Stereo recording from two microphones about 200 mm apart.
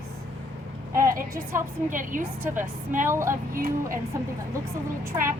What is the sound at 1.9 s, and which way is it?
A woman's voice, 40° right (ahead or behind).